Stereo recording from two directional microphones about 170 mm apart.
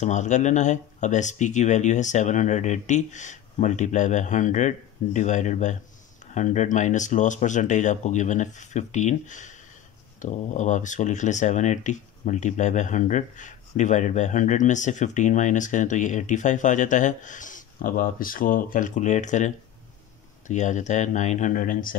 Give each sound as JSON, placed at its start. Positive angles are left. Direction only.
{"t": 0.0, "sound": "speech", "side_deg": 45}